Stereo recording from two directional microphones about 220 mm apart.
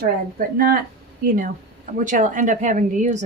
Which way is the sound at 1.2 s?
40° right (ahead or behind).